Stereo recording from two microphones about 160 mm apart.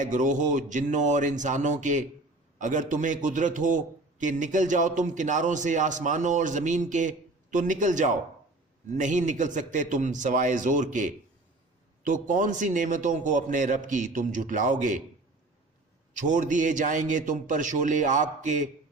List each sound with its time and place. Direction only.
0.0 s a man's voice: 50° right (ahead or behind)
16.2 s a man's voice: 50° right (ahead or behind)